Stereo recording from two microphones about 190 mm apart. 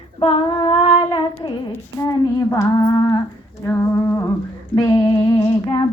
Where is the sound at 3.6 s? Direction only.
15° left (ahead or behind).